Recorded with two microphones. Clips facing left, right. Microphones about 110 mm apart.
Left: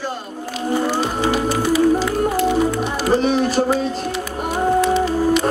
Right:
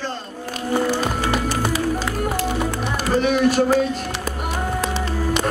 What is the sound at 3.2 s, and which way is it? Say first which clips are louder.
Speech: even; 35° left (ahead or behind).